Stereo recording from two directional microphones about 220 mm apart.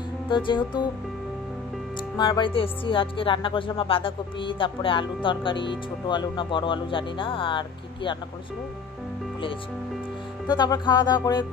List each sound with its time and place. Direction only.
0.3 s music: 20° left (ahead or behind)
2.1 s music: 20° left (ahead or behind)
10.4 s music: 20° left (ahead or behind)